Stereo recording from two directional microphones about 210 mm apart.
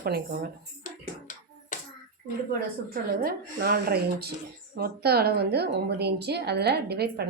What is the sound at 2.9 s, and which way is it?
A woman's voice, 45° right (ahead or behind).